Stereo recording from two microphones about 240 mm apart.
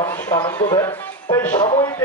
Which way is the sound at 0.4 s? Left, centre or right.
Centre.